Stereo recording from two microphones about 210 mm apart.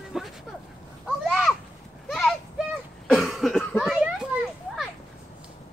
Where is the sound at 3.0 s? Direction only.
Centre (ahead or behind).